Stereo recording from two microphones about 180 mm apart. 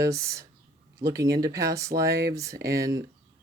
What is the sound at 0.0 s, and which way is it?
Speech, 15° right (ahead or behind).